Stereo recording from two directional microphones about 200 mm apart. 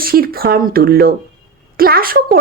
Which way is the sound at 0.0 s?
50° right (ahead or behind).